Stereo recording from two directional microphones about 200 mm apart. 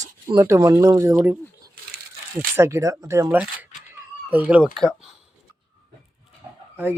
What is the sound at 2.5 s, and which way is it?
Speech, 15° right (ahead or behind).